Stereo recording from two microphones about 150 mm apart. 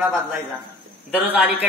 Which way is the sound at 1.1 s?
10° right (ahead or behind).